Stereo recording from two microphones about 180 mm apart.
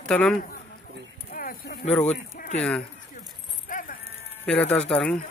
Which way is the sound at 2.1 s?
50° left (ahead or behind).